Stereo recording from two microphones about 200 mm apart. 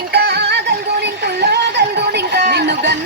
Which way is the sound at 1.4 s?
55° right (ahead or behind).